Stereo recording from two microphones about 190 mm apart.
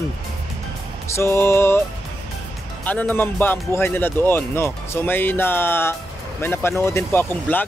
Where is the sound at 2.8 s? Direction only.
10° left (ahead or behind).